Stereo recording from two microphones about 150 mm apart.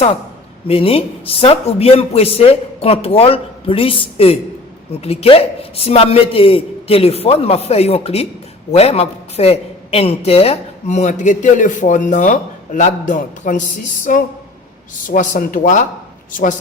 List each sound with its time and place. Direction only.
0.7 s a man's voice: 40° left (ahead or behind); by 16.6 s 60° left (ahead or behind)